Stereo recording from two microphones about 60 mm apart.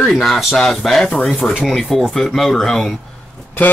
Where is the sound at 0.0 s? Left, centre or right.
Centre.